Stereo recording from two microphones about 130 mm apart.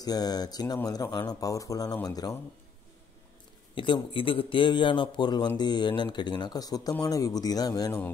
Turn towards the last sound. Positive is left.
turn(degrees=30)  # may be behind; listen again after turning